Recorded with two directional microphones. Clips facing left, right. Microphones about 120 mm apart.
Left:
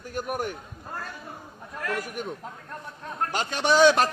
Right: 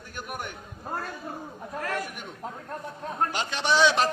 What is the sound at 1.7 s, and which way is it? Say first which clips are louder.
Speech: even; 35° right (ahead or behind).